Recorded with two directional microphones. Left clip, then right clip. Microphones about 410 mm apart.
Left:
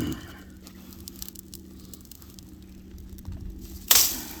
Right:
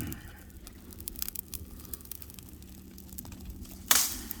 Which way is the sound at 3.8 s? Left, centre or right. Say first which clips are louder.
Left 6 dB; centre.